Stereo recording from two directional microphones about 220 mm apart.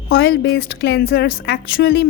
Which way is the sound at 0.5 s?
50° left (ahead or behind).